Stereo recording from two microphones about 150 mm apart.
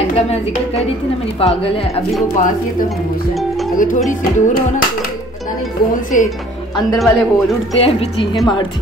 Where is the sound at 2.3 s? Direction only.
60° left (ahead or behind).